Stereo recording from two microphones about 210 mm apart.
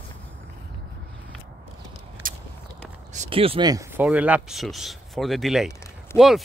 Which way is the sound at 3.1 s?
25° right (ahead or behind).